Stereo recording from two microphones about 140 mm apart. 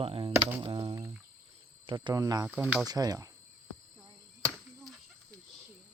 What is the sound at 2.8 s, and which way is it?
Speech, 25° right (ahead or behind).